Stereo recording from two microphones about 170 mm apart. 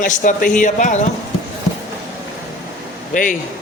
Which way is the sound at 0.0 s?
50° left (ahead or behind).